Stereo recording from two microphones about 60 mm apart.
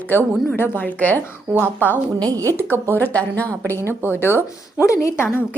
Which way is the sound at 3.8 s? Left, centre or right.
Right.